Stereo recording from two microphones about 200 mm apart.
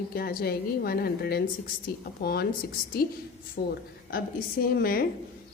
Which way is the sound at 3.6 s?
50° left (ahead or behind).